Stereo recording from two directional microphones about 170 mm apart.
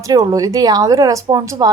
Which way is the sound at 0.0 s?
20° right (ahead or behind).